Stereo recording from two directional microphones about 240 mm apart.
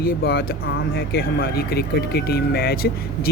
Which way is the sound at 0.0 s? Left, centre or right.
Left.